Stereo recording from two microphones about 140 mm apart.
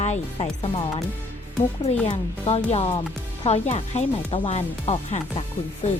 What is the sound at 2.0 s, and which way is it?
Speech, 50° left (ahead or behind).